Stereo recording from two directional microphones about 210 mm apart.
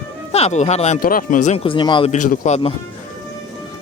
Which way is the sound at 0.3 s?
30° left (ahead or behind).